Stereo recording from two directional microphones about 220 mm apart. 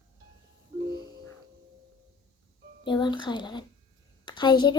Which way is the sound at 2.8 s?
20° left (ahead or behind).